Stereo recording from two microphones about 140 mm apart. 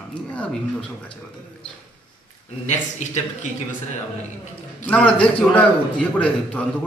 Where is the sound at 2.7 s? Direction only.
60° left (ahead or behind).